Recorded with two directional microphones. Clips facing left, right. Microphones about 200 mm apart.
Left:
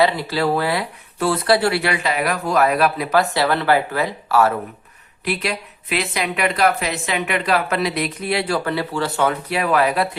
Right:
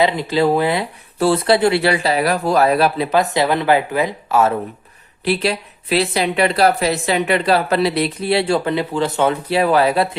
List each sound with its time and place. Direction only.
0.0 s speech: 20° right (ahead or behind)
5.2 s speech: 30° right (ahead or behind)